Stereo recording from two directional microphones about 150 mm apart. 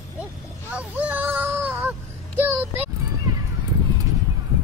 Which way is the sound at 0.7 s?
10° right (ahead or behind).